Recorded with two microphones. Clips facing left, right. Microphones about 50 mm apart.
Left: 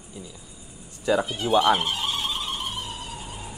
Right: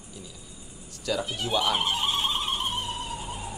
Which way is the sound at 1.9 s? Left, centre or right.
Right.